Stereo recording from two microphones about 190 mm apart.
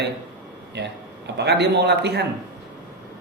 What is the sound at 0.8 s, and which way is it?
Speech, 65° right (ahead or behind).